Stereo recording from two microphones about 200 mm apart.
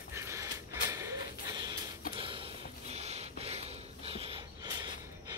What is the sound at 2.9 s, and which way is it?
Snort, 30° right (ahead or behind).